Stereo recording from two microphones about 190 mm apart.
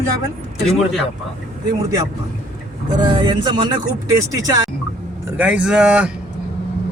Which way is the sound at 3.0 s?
25° right (ahead or behind).